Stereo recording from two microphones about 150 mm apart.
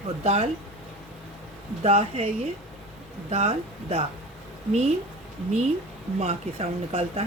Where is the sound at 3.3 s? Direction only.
45° right (ahead or behind).